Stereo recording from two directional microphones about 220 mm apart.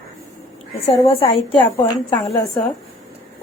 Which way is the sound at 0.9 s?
25° left (ahead or behind).